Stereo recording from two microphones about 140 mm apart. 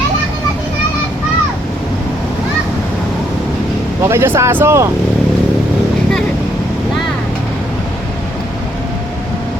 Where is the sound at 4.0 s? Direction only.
20° right (ahead or behind).